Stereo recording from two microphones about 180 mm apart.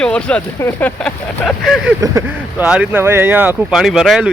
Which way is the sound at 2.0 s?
15° right (ahead or behind).